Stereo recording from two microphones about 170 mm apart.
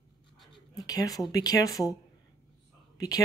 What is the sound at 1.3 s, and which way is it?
Speech, 20° left (ahead or behind).